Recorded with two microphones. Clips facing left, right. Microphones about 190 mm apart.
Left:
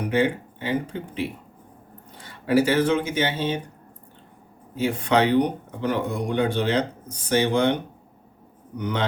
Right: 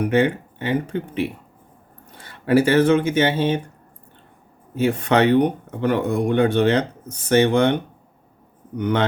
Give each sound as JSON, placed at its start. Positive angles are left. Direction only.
{"t": 0.0, "sound": "speech", "side_deg": -60}
{"t": 4.7, "sound": "speech", "side_deg": -60}